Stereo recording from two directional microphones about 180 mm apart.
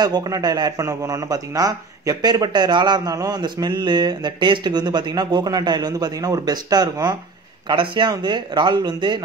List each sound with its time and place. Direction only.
0.0 s a man's voice: 20° right (ahead or behind)